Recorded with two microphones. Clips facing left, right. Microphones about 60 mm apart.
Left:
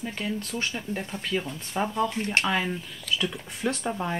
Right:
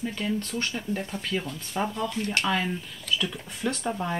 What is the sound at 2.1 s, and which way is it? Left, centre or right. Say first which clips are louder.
Speech: left 2 dB; left.